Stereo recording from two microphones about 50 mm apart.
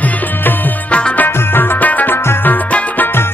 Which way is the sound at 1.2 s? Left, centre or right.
Left.